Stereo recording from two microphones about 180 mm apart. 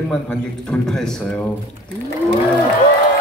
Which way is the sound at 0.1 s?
5° left (ahead or behind).